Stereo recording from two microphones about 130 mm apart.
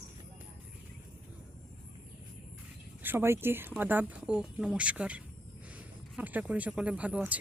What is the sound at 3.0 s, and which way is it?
Speech, 15° right (ahead or behind).